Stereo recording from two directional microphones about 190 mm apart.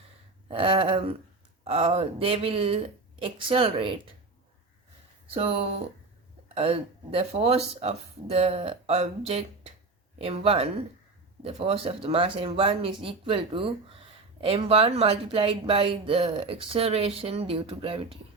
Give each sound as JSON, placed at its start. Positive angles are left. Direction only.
{"t": 0.4, "sound": "speech", "side_deg": -30}
{"t": 5.3, "sound": "speech", "side_deg": -30}